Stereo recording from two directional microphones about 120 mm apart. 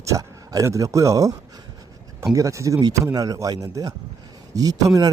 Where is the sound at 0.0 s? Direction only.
30° right (ahead or behind).